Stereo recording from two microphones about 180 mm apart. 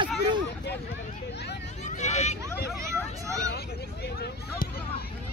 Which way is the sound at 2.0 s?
40° left (ahead or behind).